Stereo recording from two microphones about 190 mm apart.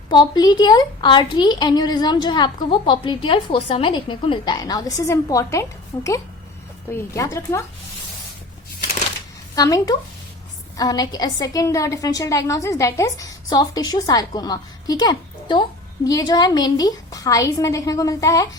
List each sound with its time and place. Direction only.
0.1 s a woman's voice: 20° left (ahead or behind)
9.6 s a woman's voice: 20° left (ahead or behind)